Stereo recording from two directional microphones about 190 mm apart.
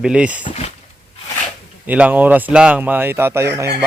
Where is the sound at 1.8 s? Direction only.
10° right (ahead or behind).